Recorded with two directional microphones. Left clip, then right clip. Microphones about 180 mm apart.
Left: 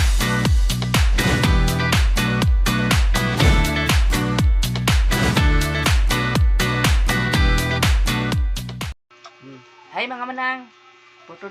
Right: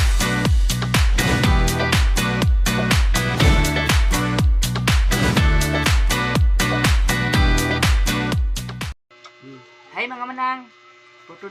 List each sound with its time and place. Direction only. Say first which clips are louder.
0.2 s music: even; centre (ahead or behind)
9.9 s music: left 1 dB; 20° left (ahead or behind)